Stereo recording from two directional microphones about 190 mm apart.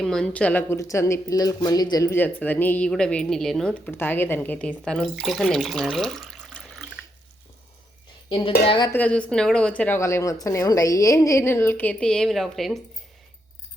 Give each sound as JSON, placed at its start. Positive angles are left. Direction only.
{"t": 0.0, "sound": "speech", "side_deg": 5}
{"t": 8.3, "sound": "speech", "side_deg": 25}
{"t": 8.9, "sound": "speech", "side_deg": 5}